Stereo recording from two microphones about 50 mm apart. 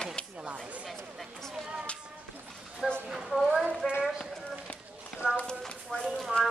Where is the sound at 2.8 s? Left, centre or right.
Centre.